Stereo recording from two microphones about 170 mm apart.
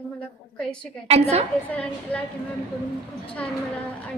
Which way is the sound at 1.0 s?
40° right (ahead or behind).